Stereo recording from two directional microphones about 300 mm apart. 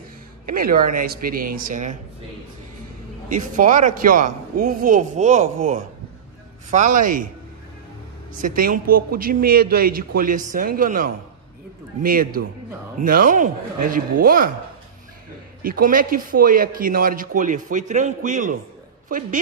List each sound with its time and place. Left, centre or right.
0.5 s speech: right
3.3 s speech: right
6.7 s speech: right
8.4 s speech: right
15.6 s speech: right